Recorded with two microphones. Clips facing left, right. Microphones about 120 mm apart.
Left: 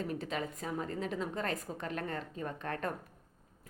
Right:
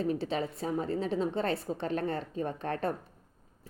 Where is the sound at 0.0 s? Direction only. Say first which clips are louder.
Right 6 dB; 30° right (ahead or behind).